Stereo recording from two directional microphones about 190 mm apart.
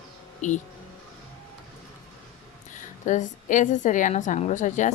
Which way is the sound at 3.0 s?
40° left (ahead or behind).